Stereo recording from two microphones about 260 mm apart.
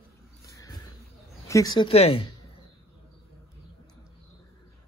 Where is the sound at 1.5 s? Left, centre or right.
Centre.